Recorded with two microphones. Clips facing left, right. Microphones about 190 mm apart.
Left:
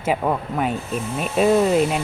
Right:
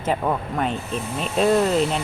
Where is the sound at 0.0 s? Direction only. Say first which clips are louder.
Left 1 dB; 10° left (ahead or behind).